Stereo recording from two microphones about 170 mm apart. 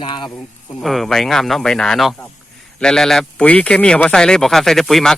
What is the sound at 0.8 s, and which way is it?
Speech, centre (ahead or behind).